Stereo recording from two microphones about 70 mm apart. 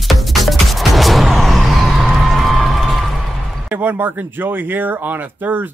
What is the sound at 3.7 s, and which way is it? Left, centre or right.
Speech, right.